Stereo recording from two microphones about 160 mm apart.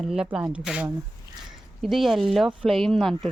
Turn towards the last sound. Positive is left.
turn(degrees=0)  # may be behind; listen again after turning